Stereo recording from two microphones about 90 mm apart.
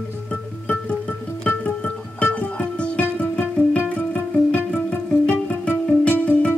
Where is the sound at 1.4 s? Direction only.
15° left (ahead or behind).